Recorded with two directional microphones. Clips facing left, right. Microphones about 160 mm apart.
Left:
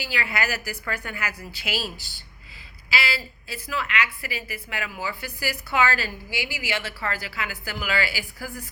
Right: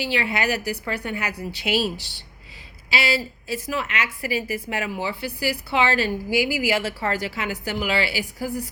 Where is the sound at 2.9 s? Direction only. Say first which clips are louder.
Right 5 dB; 35° right (ahead or behind).